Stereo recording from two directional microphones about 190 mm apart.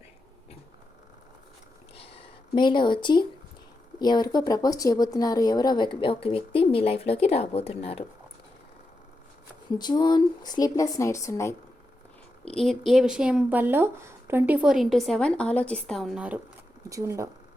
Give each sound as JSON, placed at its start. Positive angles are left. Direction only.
{"t": 2.0, "sound": "a sound", "side_deg": 25}
{"t": 4.0, "sound": "speech", "side_deg": 20}
{"t": 9.7, "sound": "speech", "side_deg": 20}
{"t": 12.5, "sound": "speech", "side_deg": 0}